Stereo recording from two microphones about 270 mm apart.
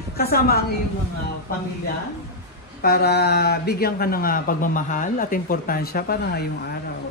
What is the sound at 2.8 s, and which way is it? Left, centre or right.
Speech, left.